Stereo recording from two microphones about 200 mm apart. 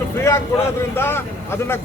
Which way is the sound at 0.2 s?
15° left (ahead or behind).